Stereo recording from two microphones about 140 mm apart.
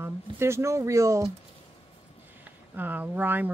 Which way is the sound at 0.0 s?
20° right (ahead or behind).